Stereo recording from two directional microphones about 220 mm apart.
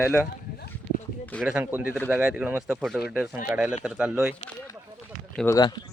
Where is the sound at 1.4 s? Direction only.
5° right (ahead or behind).